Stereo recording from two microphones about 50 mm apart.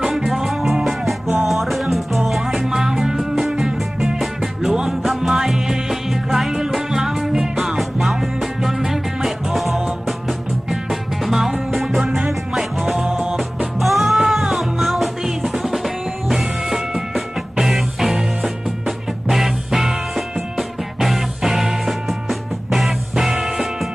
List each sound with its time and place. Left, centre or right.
0.1 s music: centre
13.7 s music: centre
15.4 s drum: centre
16.3 s music: centre